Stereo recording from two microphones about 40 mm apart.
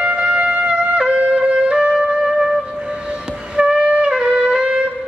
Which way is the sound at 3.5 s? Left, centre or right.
Right.